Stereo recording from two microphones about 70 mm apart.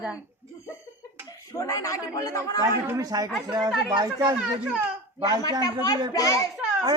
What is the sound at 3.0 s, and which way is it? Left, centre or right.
Speech, right.